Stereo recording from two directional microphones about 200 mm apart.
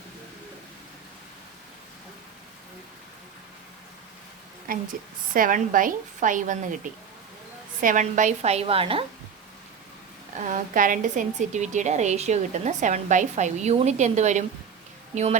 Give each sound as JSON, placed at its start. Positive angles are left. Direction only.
{"t": 4.7, "sound": "a woman's voice", "side_deg": -45}
{"t": 10.3, "sound": "a woman's voice", "side_deg": -40}